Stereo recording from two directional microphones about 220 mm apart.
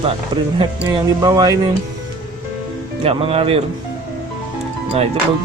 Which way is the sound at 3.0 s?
25° right (ahead or behind).